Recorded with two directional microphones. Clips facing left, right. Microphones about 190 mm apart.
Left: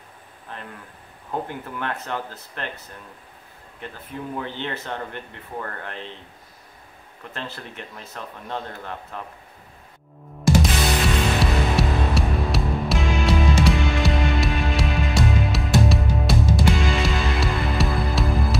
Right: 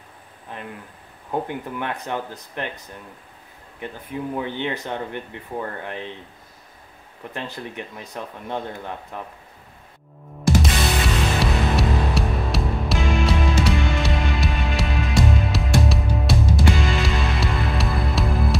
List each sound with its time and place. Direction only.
0.5 s speech: 15° right (ahead or behind)
7.3 s speech: 15° right (ahead or behind)
10.6 s music: centre (ahead or behind)